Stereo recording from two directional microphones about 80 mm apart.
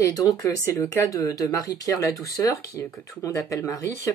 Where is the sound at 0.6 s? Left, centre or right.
Left.